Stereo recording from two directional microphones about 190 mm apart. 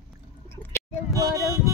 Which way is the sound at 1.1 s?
15° right (ahead or behind).